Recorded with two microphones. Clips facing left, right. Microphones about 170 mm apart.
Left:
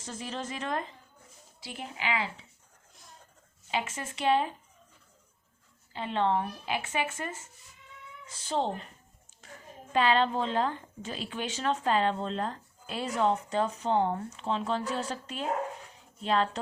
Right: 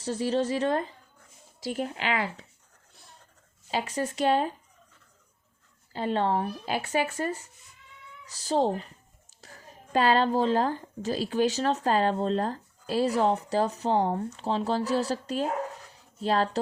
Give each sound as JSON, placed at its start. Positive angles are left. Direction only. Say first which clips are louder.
{"t": 0.0, "sound": "a woman's voice", "louder": "right 11 dB", "side_deg": -30}
{"t": 1.6, "sound": "speech", "louder": "right 6 dB", "side_deg": -45}
{"t": 3.7, "sound": "a woman's voice", "louder": "right 5 dB", "side_deg": -40}
{"t": 5.9, "sound": "a woman's voice", "louder": "right 2 dB", "side_deg": -40}
{"t": 15.9, "sound": "dog", "louder": "right 3 dB", "side_deg": -35}